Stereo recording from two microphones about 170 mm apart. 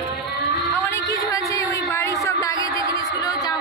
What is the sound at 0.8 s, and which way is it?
Music, 15° left (ahead or behind).